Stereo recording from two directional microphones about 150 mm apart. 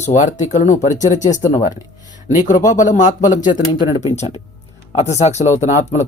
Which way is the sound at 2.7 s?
55° left (ahead or behind).